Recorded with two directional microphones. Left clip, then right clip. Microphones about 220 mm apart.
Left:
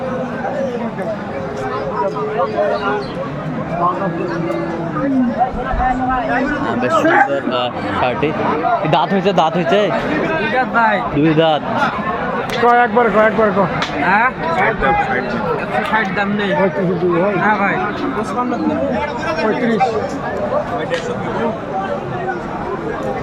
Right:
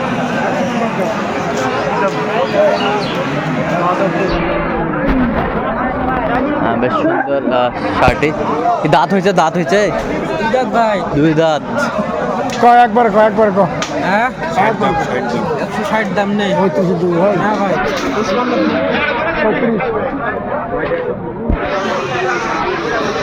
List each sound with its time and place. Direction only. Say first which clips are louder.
7.6 s speech: right 5 dB; 10° right (ahead or behind)
12.6 s speech: right 4 dB; 50° right (ahead or behind)